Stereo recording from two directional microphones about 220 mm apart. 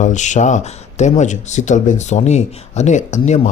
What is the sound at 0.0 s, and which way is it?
Speech, 35° left (ahead or behind).